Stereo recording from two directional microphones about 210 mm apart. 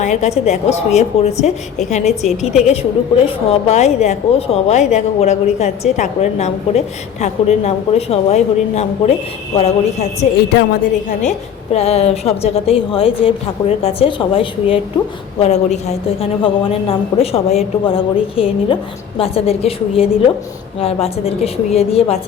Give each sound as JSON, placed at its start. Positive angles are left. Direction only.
{"t": 0.0, "sound": "a woman's voice", "side_deg": 35}
{"t": 2.4, "sound": "a woman's voice", "side_deg": 0}
{"t": 3.2, "sound": "a woman's voice", "side_deg": 30}